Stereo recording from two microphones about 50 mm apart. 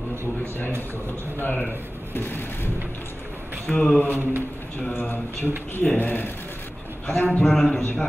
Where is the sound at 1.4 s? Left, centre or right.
Left.